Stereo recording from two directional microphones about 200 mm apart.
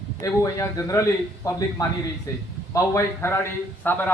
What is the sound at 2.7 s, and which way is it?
A man's voice, 15° left (ahead or behind).